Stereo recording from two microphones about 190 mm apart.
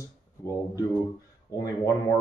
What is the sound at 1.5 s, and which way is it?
Speech, 15° left (ahead or behind).